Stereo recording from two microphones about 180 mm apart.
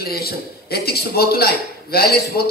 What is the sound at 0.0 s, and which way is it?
A man's voice, 60° left (ahead or behind).